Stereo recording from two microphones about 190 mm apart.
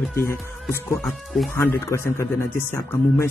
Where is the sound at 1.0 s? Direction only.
Centre (ahead or behind).